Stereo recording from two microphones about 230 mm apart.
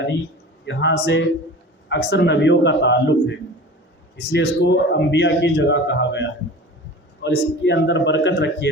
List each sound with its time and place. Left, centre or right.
0.6 s a man's voice: left
4.2 s a man's voice: left